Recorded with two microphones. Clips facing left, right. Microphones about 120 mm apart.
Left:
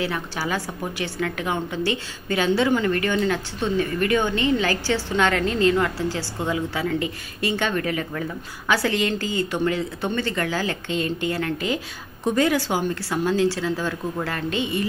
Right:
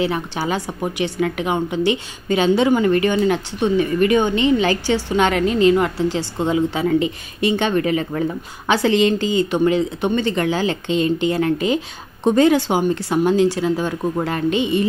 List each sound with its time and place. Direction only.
0.0 s a woman's voice: 20° right (ahead or behind)